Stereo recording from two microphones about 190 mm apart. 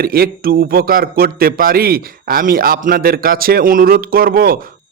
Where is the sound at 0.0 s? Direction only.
50° right (ahead or behind).